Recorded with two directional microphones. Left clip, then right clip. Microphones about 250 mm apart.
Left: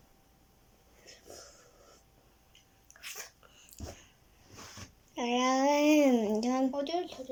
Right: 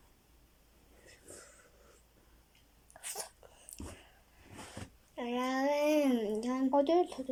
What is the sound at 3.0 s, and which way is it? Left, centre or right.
Sneeze, right.